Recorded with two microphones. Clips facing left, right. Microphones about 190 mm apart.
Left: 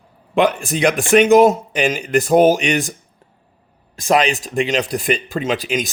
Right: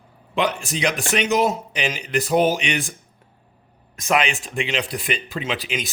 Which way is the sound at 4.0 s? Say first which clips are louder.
Left 5 dB; 35° left (ahead or behind).